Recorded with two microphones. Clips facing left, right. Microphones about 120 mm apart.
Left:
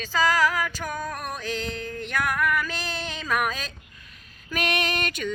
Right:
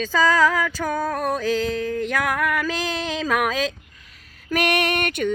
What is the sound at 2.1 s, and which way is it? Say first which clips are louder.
Female singing: left 1 dB; 90° right.